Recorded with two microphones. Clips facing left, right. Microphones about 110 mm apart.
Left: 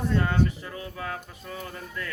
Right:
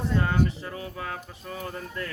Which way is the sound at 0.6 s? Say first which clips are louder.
Right 1 dB; 30° right (ahead or behind).